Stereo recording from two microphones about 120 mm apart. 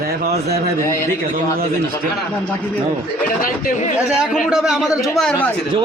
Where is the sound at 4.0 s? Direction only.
10° right (ahead or behind).